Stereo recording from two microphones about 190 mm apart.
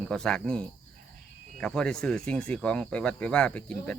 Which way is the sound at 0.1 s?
5° left (ahead or behind).